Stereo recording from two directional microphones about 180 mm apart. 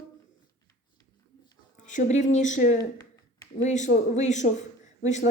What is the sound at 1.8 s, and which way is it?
Speech, 45° left (ahead or behind).